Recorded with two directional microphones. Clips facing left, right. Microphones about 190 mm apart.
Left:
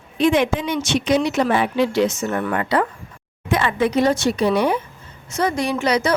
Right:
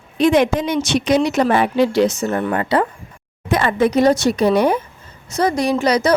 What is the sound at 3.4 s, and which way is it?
Speech, 40° right (ahead or behind).